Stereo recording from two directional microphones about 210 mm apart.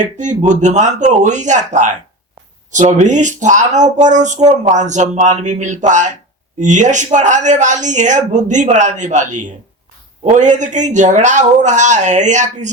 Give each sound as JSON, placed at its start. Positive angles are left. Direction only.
{"t": 0.2, "sound": "speech", "side_deg": -35}